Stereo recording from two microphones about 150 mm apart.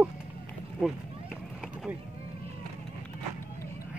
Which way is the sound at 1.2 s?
Centre (ahead or behind).